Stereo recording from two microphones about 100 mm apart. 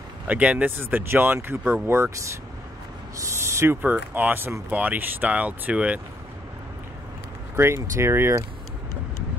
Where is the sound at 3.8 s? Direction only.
15° right (ahead or behind).